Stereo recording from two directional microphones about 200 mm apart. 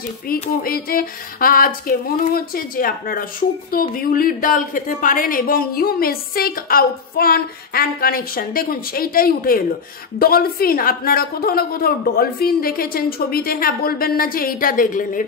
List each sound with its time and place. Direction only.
0.3 s speech: 45° left (ahead or behind)